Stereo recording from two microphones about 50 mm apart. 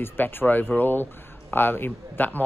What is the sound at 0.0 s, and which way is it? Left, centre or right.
Speech, left.